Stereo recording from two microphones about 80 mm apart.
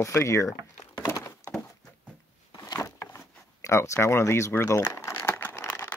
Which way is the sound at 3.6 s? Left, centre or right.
Left.